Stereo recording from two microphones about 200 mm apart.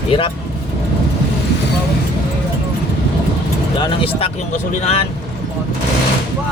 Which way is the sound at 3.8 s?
30° left (ahead or behind).